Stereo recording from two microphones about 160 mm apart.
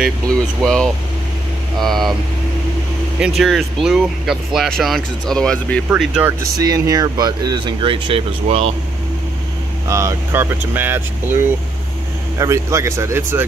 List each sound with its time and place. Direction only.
0.6 s speech: 5° left (ahead or behind)
3.2 s speech: 5° right (ahead or behind)
5.9 s speech: 10° right (ahead or behind)
6.5 s speech: 25° right (ahead or behind); by 8.7 s 40° right (ahead or behind)
9.8 s speech: 20° right (ahead or behind)
12.4 s speech: 20° right (ahead or behind)